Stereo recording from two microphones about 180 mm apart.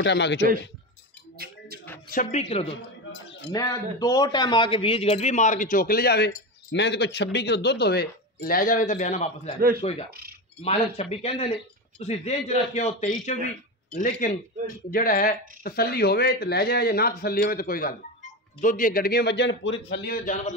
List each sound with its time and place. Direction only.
0.0 s a man's voice: 75° left (ahead or behind)
2.1 s a man's voice: 35° left (ahead or behind)
2.7 s a sound: 75° left (ahead or behind)
3.5 s a man's voice: 20° left (ahead or behind)
10.0 s a sound: 60° right (ahead or behind)
10.6 s a man's voice: 35° left (ahead or behind); by 20.5 s 50° left (ahead or behind)